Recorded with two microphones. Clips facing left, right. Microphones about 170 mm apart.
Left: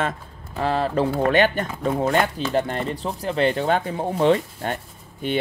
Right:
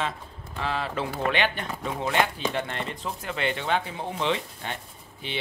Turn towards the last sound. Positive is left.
turn(degrees=45)  # may be behind; listen again after turning